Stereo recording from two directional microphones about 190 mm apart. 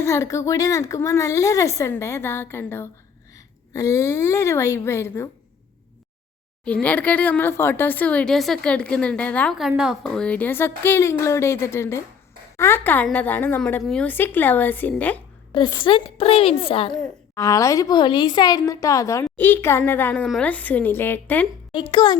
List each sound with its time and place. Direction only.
0.0 s a woman's voice: 15° left (ahead or behind)
6.7 s speech: 5° left (ahead or behind)
15.5 s a woman's voice: 25° left (ahead or behind)
17.3 s speech: 15° left (ahead or behind)
21.7 s a woman's voice: 25° left (ahead or behind)